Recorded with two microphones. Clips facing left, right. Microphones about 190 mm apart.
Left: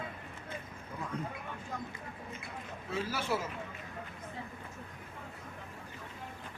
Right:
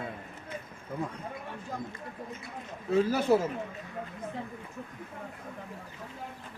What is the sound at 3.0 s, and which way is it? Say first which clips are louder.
Speech: right 8 dB; 50° right (ahead or behind).